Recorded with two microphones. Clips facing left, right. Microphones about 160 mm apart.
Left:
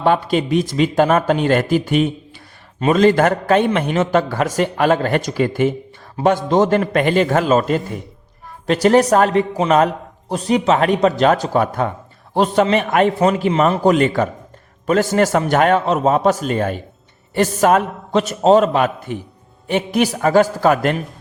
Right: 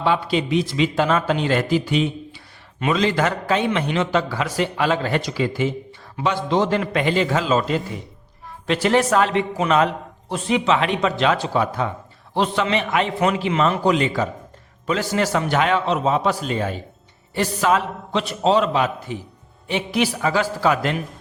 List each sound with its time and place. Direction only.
0.0 s a man's voice: 50° left (ahead or behind)
13.1 s a man's voice: 40° left (ahead or behind)